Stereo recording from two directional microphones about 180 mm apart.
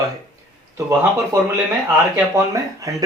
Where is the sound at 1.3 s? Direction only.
15° right (ahead or behind).